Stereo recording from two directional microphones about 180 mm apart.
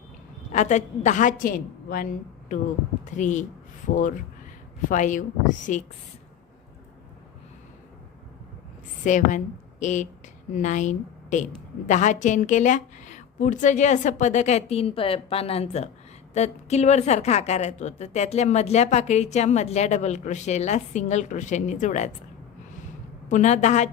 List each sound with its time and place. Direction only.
0.5 s a woman's voice: 40° left (ahead or behind)
9.0 s a woman's voice: 45° left (ahead or behind)
23.3 s a woman's voice: 40° left (ahead or behind)